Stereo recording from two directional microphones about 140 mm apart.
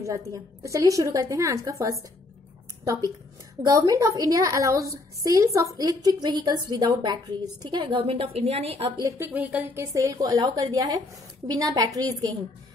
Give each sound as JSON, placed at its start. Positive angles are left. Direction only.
{"t": 0.0, "sound": "a woman's voice", "side_deg": -20}
{"t": 9.0, "sound": "speech", "side_deg": -15}
{"t": 9.9, "sound": "a woman's voice", "side_deg": -25}